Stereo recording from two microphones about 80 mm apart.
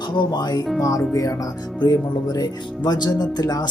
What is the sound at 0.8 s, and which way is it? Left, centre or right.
Speech, left.